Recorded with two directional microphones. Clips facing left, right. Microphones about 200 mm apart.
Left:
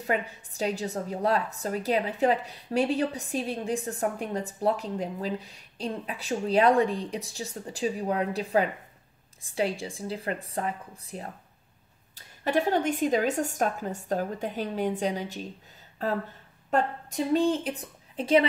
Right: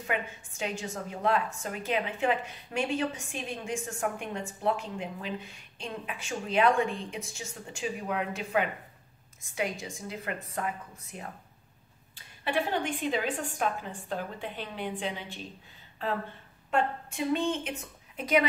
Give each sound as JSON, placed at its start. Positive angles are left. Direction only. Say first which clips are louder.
{"t": 0.0, "sound": "a woman's voice", "louder": "left 4 dB", "side_deg": 35}